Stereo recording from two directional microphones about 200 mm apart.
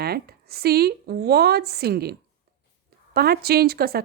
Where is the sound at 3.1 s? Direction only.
50° right (ahead or behind).